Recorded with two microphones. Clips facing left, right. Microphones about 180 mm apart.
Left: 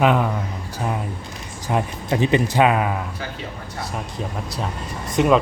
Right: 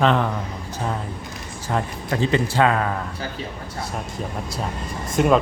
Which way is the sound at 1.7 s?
15° left (ahead or behind).